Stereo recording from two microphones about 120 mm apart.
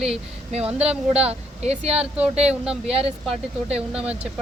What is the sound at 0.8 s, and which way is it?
Speech, 60° right (ahead or behind).